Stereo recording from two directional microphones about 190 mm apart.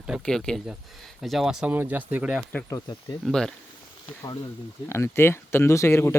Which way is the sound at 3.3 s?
5° left (ahead or behind).